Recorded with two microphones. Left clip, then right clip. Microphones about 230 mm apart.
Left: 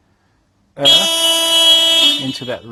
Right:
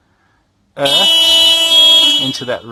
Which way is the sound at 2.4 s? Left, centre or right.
Right.